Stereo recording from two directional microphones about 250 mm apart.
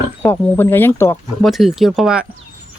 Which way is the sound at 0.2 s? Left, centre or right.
Centre.